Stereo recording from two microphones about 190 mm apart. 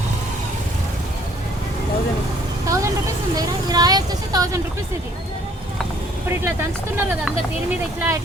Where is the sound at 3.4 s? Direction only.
20° right (ahead or behind).